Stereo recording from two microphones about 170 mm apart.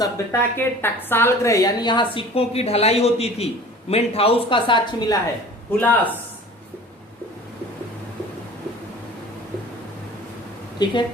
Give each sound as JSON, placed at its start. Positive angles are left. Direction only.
{"t": 0.0, "sound": "a woman's voice", "side_deg": 15}
{"t": 5.7, "sound": "a man's voice", "side_deg": 10}
{"t": 10.8, "sound": "speech", "side_deg": 25}